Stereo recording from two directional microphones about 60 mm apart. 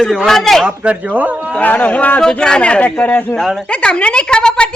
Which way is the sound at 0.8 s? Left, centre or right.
Right.